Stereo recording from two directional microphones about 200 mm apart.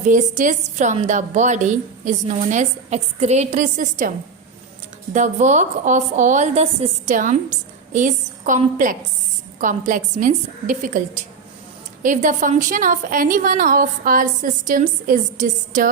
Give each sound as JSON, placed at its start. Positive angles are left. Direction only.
{"t": 0.0, "sound": "a woman's voice", "side_deg": -40}
{"t": 5.1, "sound": "a woman's voice", "side_deg": -35}